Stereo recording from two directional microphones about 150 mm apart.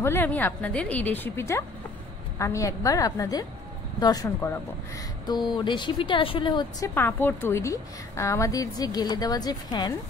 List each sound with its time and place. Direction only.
0.0 s a woman's voice: 15° left (ahead or behind); by 6.9 s 30° left (ahead or behind)
6.9 s a woman's voice: 15° left (ahead or behind)